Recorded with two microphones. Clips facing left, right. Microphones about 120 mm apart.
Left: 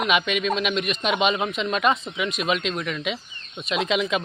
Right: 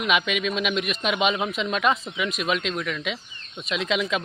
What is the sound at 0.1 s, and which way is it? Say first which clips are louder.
A man's voice: right 1 dB; centre (ahead or behind).